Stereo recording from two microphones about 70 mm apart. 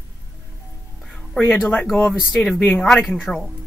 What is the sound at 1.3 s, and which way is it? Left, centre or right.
A woman's voice, centre.